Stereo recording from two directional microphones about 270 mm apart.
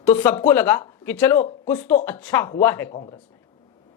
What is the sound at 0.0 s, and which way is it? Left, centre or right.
Speech, centre.